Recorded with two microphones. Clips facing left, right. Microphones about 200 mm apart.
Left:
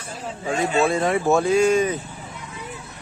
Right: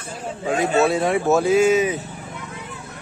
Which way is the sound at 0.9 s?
Centre (ahead or behind).